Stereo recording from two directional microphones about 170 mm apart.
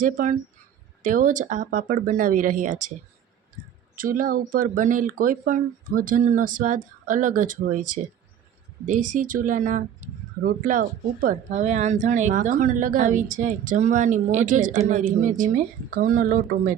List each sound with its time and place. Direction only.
0.0 s speech: 50° right (ahead or behind)
3.9 s speech: 55° right (ahead or behind)